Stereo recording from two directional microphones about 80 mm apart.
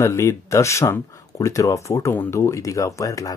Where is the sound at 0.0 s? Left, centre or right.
Left.